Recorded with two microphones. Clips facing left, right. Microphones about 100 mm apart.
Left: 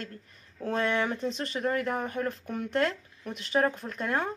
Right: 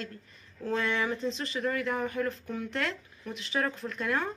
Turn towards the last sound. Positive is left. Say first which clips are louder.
# left 1 dB
turn(degrees=35)  # may be behind; listen again after turning